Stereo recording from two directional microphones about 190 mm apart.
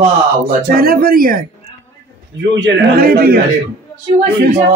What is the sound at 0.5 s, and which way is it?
Speech, 50° right (ahead or behind).